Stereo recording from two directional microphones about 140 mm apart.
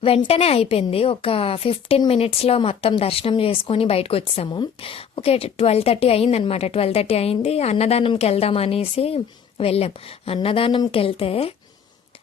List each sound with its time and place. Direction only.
0.0 s a woman's voice: 45° left (ahead or behind)